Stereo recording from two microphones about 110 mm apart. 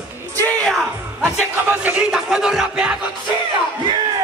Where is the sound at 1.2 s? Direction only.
15° right (ahead or behind).